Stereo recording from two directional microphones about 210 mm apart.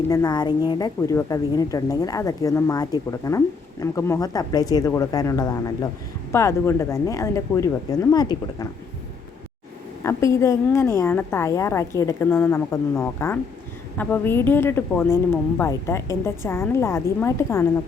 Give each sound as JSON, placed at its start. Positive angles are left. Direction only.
{"t": 0.1, "sound": "a woman's voice", "side_deg": 20}
{"t": 10.0, "sound": "a woman's voice", "side_deg": 15}